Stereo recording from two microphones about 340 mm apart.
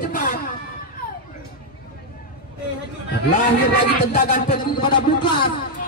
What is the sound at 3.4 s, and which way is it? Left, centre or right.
A man's voice, left.